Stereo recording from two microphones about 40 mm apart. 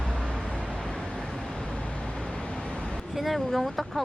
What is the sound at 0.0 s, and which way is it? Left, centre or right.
Vehicle, centre.